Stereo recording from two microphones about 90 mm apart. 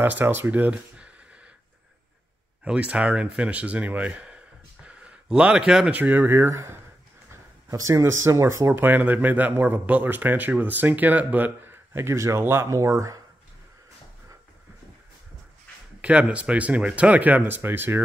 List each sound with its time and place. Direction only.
0.0 s speech: 25° right (ahead or behind)
2.6 s speech: 15° right (ahead or behind)
4.8 s a sound: 15° right (ahead or behind)
5.9 s speech: 20° right (ahead or behind); by 13.2 s 35° right (ahead or behind)
16.0 s speech: 15° right (ahead or behind)